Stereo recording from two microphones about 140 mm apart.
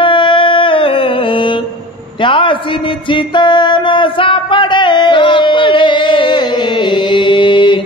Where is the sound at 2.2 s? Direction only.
35° left (ahead or behind).